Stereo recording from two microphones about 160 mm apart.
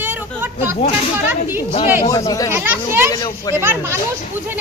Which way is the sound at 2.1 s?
20° left (ahead or behind).